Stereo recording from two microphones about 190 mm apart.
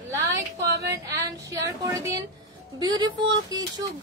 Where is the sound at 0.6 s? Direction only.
60° right (ahead or behind).